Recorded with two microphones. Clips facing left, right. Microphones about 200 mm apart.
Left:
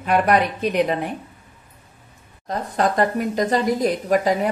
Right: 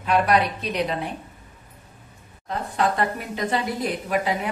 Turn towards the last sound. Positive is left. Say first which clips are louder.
# left 6 dB
turn(degrees=40)  # may be behind; listen again after turning